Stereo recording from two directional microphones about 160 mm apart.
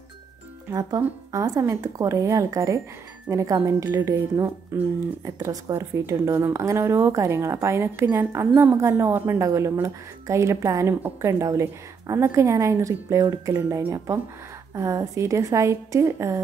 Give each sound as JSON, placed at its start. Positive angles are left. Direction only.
{"t": 0.7, "sound": "a woman's voice", "side_deg": -25}